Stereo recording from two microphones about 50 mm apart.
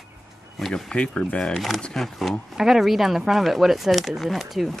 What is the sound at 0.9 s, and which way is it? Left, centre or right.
Speech, left.